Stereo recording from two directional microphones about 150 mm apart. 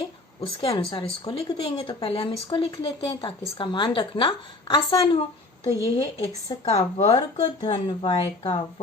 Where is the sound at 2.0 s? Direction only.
40° left (ahead or behind).